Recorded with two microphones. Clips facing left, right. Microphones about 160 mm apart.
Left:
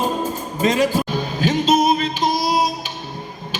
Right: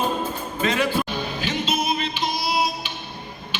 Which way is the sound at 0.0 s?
40° left (ahead or behind).